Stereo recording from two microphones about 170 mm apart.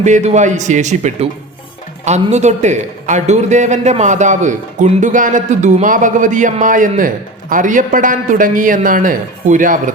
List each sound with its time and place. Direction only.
0.0 s a man's voice: 45° right (ahead or behind)